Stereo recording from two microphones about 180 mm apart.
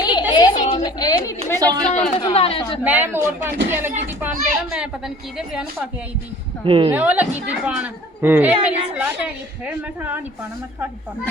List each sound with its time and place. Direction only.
0.0 s a sound: 25° left (ahead or behind)
1.9 s speech: 35° left (ahead or behind)
2.8 s a woman's voice: 10° right (ahead or behind)
6.7 s speech: 30° right (ahead or behind)
6.9 s a woman's voice: 10° right (ahead or behind)